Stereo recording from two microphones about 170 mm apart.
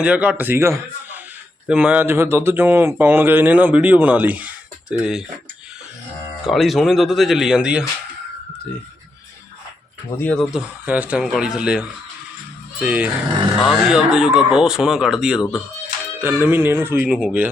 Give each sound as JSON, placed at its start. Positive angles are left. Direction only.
{"t": 0.0, "sound": "a man's voice", "side_deg": -5}
{"t": 6.4, "sound": "speech", "side_deg": 0}
{"t": 10.2, "sound": "speech", "side_deg": 10}
{"t": 10.5, "sound": "speech", "side_deg": -10}